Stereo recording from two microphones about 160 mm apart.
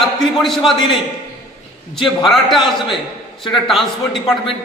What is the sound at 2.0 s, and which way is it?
A man's voice, centre (ahead or behind).